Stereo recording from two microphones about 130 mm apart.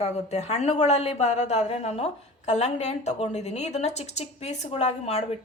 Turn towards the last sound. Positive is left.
turn(degrees=55)  # may be behind; listen again after turning